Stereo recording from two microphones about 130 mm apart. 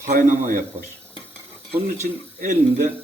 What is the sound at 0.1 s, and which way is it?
Speech, 90° right.